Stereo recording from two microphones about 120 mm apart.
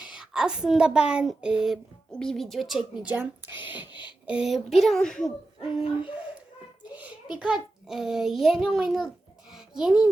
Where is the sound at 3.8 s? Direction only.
40° left (ahead or behind).